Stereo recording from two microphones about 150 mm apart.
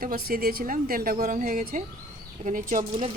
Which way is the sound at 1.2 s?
65° right (ahead or behind).